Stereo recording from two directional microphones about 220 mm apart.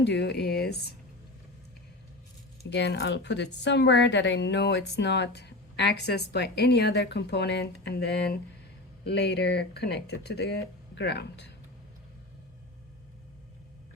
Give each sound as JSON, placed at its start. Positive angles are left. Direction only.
{"t": 0.0, "sound": "a woman's voice", "side_deg": 50}
{"t": 2.6, "sound": "a woman's voice", "side_deg": 50}